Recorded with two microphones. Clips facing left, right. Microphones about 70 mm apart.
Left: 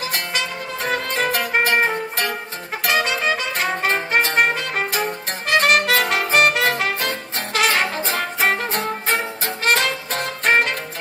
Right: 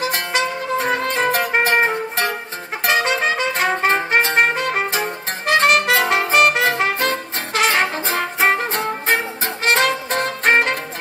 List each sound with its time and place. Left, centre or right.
0.0 s music: right